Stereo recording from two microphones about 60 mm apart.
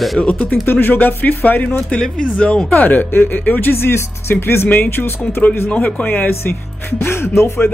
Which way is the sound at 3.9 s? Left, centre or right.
Left.